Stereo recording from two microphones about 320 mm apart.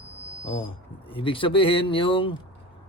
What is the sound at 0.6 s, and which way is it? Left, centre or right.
A man's voice, centre.